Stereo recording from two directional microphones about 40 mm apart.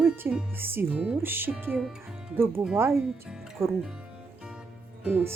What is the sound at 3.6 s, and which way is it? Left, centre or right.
Speech, right.